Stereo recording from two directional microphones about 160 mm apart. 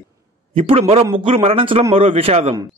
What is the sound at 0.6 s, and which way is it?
Speech, 40° right (ahead or behind).